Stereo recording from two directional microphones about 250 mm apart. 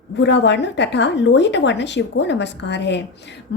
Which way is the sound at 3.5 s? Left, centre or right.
Left.